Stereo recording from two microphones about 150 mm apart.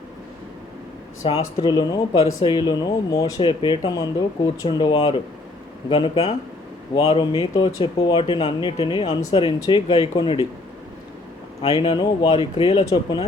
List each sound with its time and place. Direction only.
1.2 s speech: 35° left (ahead or behind)
11.6 s speech: 40° left (ahead or behind)